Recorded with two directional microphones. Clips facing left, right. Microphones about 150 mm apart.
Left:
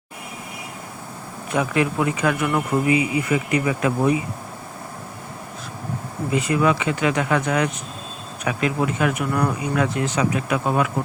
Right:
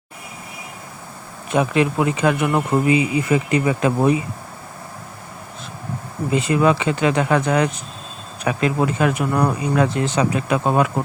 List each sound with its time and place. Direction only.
1.5 s speech: 25° right (ahead or behind)
6.3 s speech: 30° right (ahead or behind)